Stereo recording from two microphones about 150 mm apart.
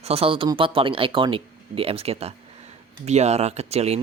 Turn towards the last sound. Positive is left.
turn(degrees=-45)  # may be behind; listen again after turning